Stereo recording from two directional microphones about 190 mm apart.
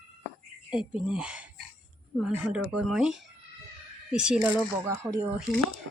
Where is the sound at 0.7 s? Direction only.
5° right (ahead or behind).